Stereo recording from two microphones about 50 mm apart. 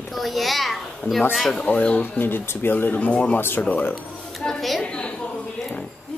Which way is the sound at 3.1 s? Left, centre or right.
Left.